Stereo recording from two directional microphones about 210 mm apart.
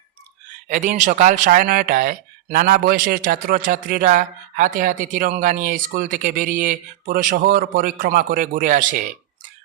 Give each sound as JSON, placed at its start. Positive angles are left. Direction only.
{"t": 0.7, "sound": "speech", "side_deg": -35}